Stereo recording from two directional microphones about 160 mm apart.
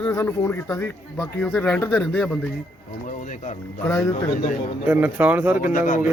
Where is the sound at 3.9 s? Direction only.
20° left (ahead or behind).